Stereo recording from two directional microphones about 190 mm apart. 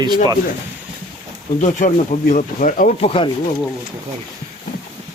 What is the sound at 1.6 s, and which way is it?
Speech, 40° left (ahead or behind).